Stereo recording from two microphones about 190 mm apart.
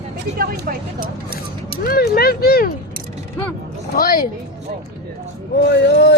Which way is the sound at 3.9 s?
50° left (ahead or behind).